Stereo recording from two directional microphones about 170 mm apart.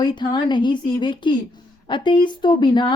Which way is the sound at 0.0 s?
25° left (ahead or behind).